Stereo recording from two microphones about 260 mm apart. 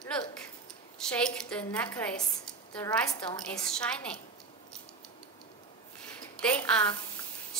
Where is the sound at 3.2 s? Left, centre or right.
Centre.